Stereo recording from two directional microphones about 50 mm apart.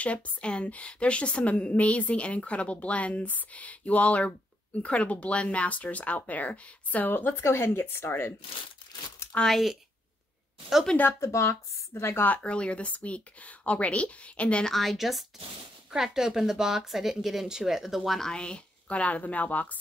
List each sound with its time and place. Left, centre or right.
0.0 s a woman's voice: left
7.1 s speech: left
7.4 s speech: left
9.3 s speech: left
11.1 s speech: left
11.9 s speech: left
12.4 s a woman's voice: left
14.7 s a woman's voice: centre
15.9 s speech: centre
18.0 s a woman's voice: centre
18.3 s a woman's voice: centre